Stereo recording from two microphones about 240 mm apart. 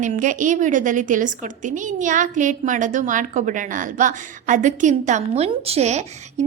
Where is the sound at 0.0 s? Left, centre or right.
Right.